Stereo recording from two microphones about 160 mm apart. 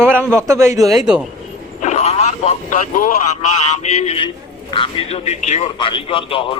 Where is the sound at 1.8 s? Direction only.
45° left (ahead or behind).